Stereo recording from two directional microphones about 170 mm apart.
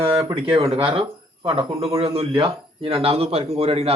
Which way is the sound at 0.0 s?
30° right (ahead or behind).